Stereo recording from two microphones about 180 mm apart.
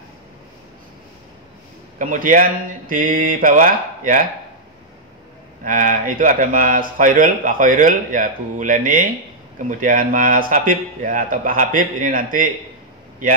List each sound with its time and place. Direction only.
2.0 s speech: 50° right (ahead or behind)
5.6 s speech: 50° right (ahead or behind)